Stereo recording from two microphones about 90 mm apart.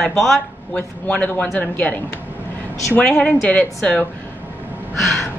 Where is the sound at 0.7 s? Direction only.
15° left (ahead or behind).